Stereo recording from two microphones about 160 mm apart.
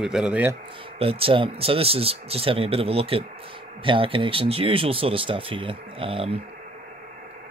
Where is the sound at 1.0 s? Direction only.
35° right (ahead or behind).